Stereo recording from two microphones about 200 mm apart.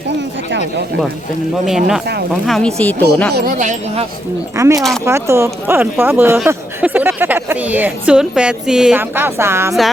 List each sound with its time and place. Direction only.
1.6 s speech: 5° right (ahead or behind)
3.3 s speech: 45° right (ahead or behind)
4.5 s speech: 15° right (ahead or behind)